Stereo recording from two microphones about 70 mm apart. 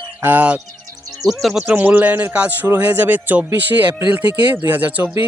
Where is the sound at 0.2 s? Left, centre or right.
Right.